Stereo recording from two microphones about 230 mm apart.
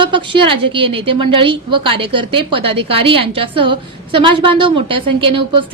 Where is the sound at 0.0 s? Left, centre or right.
Right.